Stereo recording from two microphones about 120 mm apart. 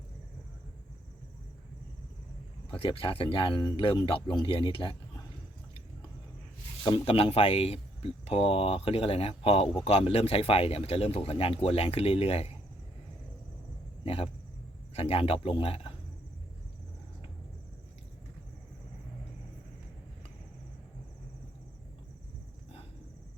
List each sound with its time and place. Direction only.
2.7 s speech: 50° left (ahead or behind)
7.0 s speech: 55° left (ahead or behind)
14.0 s speech: 50° left (ahead or behind)